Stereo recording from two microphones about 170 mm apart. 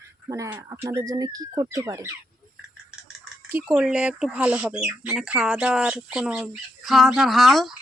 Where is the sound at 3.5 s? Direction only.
10° right (ahead or behind).